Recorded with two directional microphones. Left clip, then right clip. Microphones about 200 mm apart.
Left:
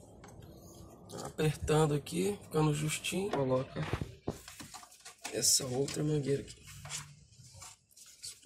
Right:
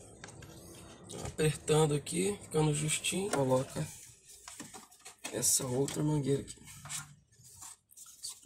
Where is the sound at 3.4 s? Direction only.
60° right (ahead or behind).